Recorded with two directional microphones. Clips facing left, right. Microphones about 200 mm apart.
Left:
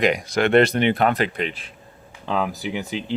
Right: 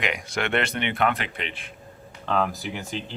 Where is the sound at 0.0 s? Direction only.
40° left (ahead or behind).